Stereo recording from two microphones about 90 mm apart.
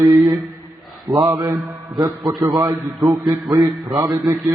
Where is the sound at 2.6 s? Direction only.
5° right (ahead or behind).